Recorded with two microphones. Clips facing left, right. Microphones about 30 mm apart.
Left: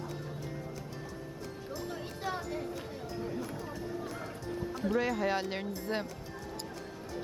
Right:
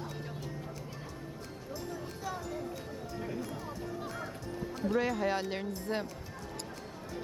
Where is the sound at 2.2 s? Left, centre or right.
Left.